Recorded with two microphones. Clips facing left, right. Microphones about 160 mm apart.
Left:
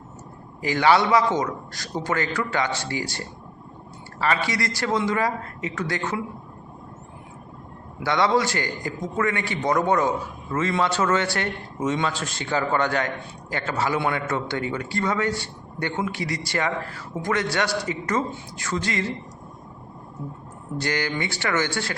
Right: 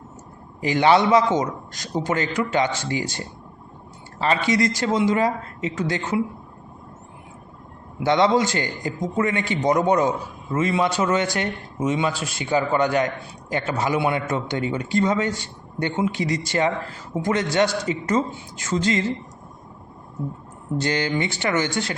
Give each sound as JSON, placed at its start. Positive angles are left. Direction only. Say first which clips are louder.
{"t": 0.6, "sound": "a man's voice", "louder": "right 2 dB", "side_deg": -20}
{"t": 7.9, "sound": "a man's voice", "louder": "right 3 dB", "side_deg": -20}
{"t": 20.7, "sound": "a man's voice", "louder": "right 3 dB", "side_deg": -20}